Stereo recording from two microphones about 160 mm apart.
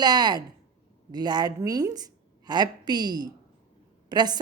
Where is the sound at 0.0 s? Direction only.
25° right (ahead or behind).